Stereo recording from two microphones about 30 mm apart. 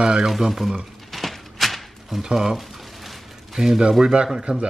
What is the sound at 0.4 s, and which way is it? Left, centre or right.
Speech, centre.